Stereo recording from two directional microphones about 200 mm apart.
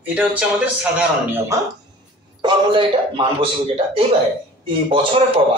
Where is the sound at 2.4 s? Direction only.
25° right (ahead or behind).